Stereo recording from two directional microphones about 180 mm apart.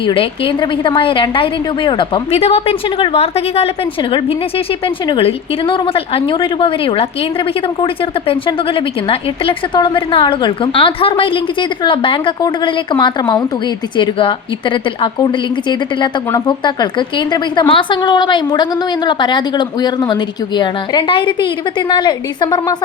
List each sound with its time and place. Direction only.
0.0 s a woman's voice: 30° left (ahead or behind)
8.3 s a woman's voice: 30° left (ahead or behind)